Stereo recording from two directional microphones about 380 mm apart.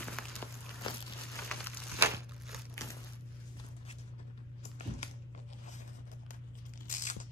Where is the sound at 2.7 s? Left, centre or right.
Centre.